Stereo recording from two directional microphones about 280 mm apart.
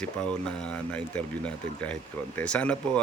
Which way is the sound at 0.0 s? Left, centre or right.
Centre.